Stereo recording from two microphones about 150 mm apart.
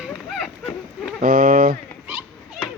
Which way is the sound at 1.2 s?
75° right (ahead or behind).